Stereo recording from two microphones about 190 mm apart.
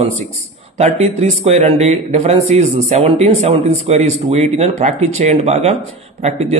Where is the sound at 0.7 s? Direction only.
35° right (ahead or behind).